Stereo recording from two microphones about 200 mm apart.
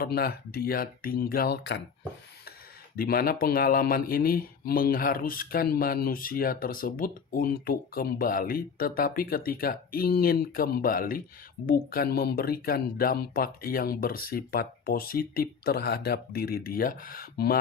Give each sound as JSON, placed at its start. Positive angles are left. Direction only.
{"t": 0.0, "sound": "speech", "side_deg": 50}
{"t": 2.9, "sound": "speech", "side_deg": 45}